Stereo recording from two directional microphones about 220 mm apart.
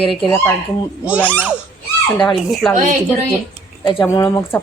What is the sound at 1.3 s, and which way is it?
Speech, 10° right (ahead or behind).